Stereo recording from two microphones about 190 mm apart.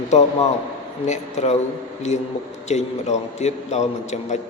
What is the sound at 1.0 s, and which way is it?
A man's voice, 35° left (ahead or behind).